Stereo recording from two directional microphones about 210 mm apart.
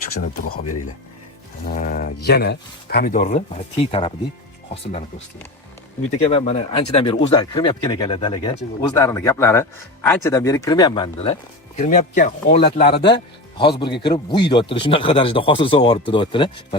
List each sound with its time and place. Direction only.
1.6 s mantra: 45° left (ahead or behind)
2.2 s speech: 50° left (ahead or behind); by 5.0 s 30° left (ahead or behind)
6.2 s speech: 30° left (ahead or behind)
11.8 s speech: 35° left (ahead or behind)